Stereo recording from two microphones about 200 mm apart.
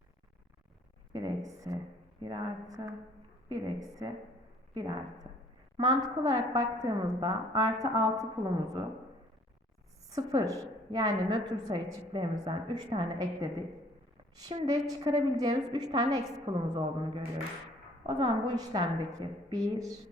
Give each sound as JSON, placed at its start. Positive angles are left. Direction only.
{"t": 1.1, "sound": "a woman's voice", "side_deg": -15}
{"t": 10.1, "sound": "a woman's voice", "side_deg": -15}
{"t": 14.6, "sound": "a woman's voice", "side_deg": -20}